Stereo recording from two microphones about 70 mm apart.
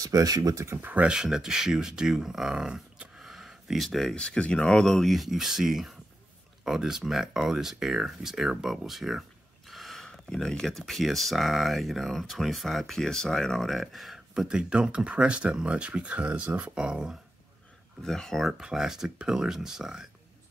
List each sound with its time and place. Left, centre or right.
0.0 s speech: right
0.7 s speech: right
1.0 s speech: centre
4.1 s speech: centre
18.0 s speech: centre
18.5 s speech: centre